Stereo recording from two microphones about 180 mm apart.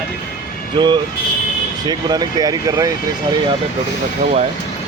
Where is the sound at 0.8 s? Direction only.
25° right (ahead or behind).